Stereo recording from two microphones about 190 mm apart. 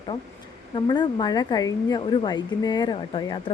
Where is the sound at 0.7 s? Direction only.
20° left (ahead or behind).